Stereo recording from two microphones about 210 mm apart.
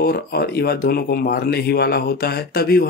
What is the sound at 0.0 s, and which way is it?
Speech, 50° left (ahead or behind).